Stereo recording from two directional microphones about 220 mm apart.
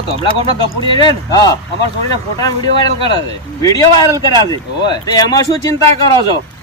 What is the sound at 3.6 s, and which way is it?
Speech, 15° left (ahead or behind).